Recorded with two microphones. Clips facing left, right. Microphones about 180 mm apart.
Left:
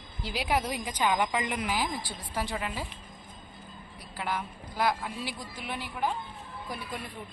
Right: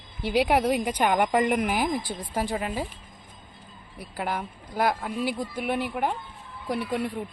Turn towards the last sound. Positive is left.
turn(degrees=-75)  # may be behind; listen again after turning